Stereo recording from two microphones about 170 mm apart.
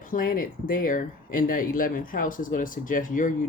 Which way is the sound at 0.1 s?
55° left (ahead or behind).